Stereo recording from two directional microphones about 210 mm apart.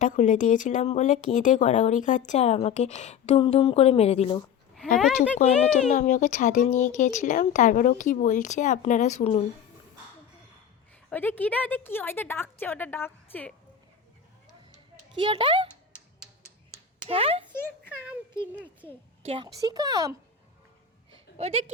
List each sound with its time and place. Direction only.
0.0 s speech: 35° left (ahead or behind)
4.9 s speech: centre (ahead or behind)
5.4 s speech: 35° left (ahead or behind)
11.1 s a woman's voice: 10° left (ahead or behind)
15.1 s speech: 25° right (ahead or behind)
17.1 s speech: 25° right (ahead or behind)
19.3 s speech: 20° right (ahead or behind)
21.1 s a sound: 30° right (ahead or behind)